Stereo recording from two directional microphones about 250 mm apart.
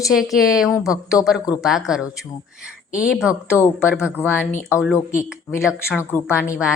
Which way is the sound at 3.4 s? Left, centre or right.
Centre.